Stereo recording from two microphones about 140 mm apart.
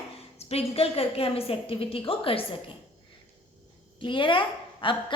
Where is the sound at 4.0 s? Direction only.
35° left (ahead or behind).